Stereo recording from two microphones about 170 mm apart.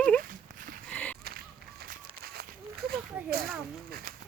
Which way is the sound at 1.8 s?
65° right (ahead or behind).